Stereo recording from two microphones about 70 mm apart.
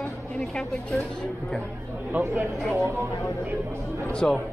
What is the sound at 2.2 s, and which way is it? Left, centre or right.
Speech, right.